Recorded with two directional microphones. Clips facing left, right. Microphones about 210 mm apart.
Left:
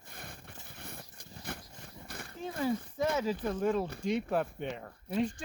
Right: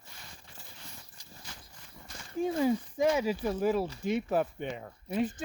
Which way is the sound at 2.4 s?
15° right (ahead or behind).